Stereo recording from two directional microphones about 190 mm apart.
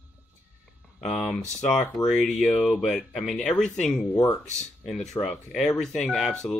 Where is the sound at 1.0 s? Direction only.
5° left (ahead or behind).